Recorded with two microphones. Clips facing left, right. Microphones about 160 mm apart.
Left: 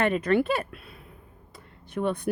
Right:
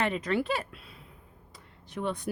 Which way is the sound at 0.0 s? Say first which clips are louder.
Left 6 dB; 55° left (ahead or behind).